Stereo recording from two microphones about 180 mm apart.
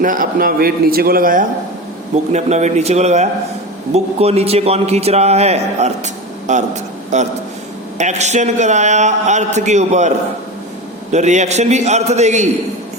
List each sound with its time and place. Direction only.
0.0 s a man's voice: 50° right (ahead or behind)
2.3 s a man's voice: 40° right (ahead or behind)
11.1 s a man's voice: 40° right (ahead or behind)